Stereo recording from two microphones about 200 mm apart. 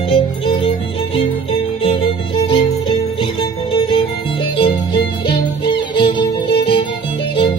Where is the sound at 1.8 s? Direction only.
25° left (ahead or behind).